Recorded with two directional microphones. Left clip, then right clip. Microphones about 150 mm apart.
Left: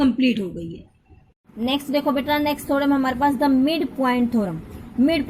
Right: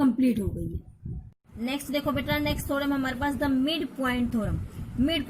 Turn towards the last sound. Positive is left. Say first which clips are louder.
# left 7 dB
turn(degrees=15)  # may be behind; listen again after turning